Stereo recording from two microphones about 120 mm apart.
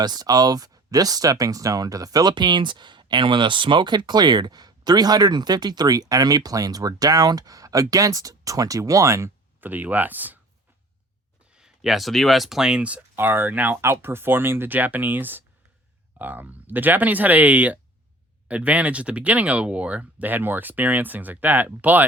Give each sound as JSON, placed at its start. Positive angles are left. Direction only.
{"t": 0.0, "sound": "speech", "side_deg": -35}
{"t": 11.5, "sound": "speech", "side_deg": -5}